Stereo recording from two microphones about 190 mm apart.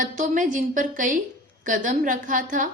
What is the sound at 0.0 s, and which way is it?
A woman's voice, 45° right (ahead or behind).